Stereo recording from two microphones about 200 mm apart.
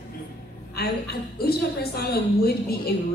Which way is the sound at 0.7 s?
50° left (ahead or behind).